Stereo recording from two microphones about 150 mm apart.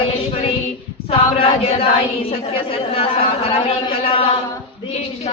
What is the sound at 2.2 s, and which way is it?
Speech, 40° left (ahead or behind).